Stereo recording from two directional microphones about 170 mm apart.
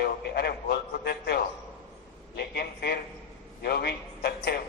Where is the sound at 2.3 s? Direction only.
75° left (ahead or behind).